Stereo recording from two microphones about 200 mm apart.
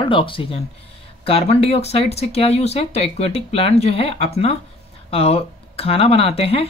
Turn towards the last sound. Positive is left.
turn(degrees=30)  # may be behind; listen again after turning